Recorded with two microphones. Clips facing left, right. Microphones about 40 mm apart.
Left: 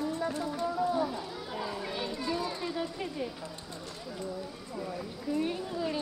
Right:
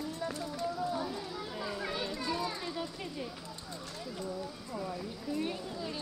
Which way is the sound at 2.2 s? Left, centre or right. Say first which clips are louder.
Left 3 dB; left.